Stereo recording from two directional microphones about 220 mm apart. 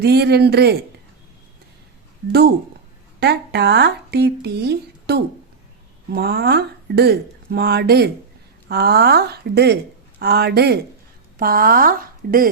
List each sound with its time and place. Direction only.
0.0 s speech: 50° right (ahead or behind)
3.2 s a woman's voice: 50° right (ahead or behind)